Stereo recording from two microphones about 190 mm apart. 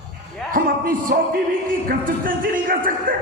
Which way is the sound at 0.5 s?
45° right (ahead or behind).